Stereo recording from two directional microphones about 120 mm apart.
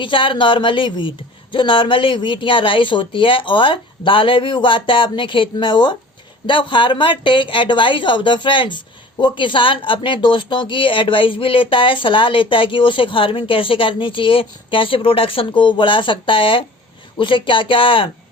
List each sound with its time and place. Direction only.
0.0 s speech: 45° left (ahead or behind)